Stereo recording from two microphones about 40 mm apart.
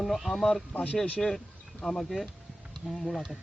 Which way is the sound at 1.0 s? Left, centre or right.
Centre.